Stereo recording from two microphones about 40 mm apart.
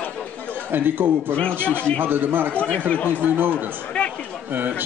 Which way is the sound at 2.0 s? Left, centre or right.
Right.